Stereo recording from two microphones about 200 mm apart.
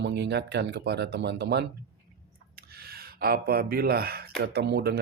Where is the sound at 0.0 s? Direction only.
60° right (ahead or behind).